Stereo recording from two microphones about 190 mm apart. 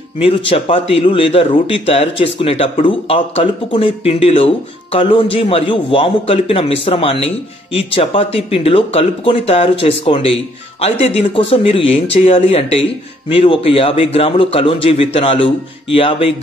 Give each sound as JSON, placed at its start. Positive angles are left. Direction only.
{"t": 0.2, "sound": "a man's voice", "side_deg": 30}